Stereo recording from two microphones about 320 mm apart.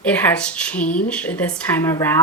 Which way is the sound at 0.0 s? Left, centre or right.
Centre.